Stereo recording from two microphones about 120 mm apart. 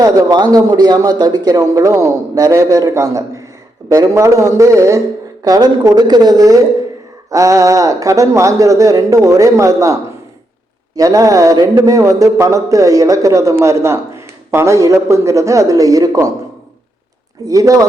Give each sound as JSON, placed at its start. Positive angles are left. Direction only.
{"t": 0.0, "sound": "speech", "side_deg": -30}
{"t": 17.4, "sound": "speech", "side_deg": -30}